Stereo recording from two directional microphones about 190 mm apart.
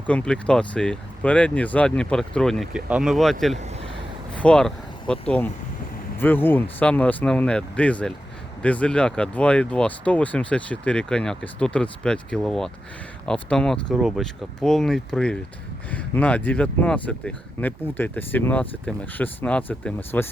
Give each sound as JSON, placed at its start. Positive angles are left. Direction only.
{"t": 0.1, "sound": "speech", "side_deg": 5}
{"t": 3.5, "sound": "vehicle", "side_deg": -35}
{"t": 4.4, "sound": "speech", "side_deg": 5}